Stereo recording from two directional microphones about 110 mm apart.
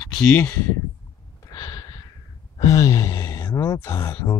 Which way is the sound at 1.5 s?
40° left (ahead or behind).